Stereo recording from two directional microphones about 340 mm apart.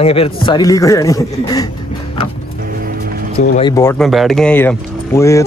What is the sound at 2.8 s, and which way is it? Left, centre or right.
Music, right.